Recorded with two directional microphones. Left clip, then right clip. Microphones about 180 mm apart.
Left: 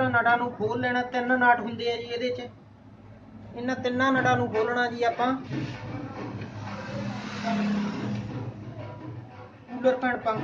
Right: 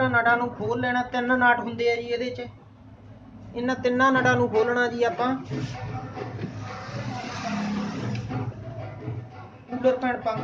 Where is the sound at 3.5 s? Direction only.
25° right (ahead or behind).